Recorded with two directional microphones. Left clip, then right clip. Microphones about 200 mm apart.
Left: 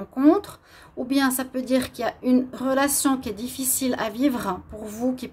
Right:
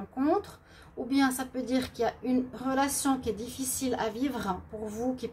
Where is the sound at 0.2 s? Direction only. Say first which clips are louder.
Left 9 dB; 55° left (ahead or behind).